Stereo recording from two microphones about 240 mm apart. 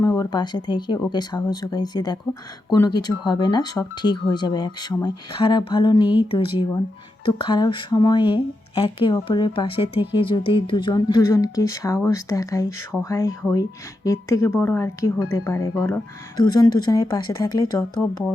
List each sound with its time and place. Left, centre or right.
0.0 s speech: centre